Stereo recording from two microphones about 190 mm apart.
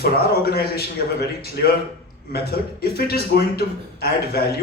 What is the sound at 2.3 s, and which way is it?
A man's voice, 55° left (ahead or behind).